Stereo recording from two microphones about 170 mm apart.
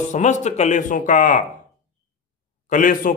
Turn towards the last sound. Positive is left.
turn(degrees=50)  # may be behind; listen again after turning